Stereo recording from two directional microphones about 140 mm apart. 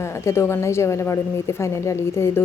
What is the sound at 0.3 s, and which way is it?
A woman's voice, 20° left (ahead or behind).